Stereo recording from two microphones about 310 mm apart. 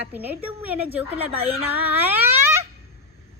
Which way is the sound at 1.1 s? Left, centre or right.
Centre.